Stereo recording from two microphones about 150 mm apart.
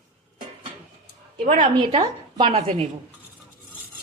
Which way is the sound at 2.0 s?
30° right (ahead or behind).